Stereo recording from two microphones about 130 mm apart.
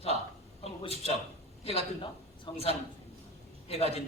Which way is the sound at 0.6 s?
50° left (ahead or behind).